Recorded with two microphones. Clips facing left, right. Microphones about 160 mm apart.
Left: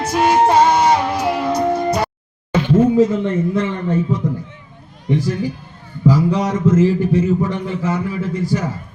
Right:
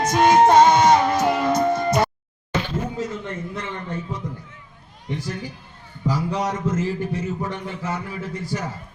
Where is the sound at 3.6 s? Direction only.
90° left.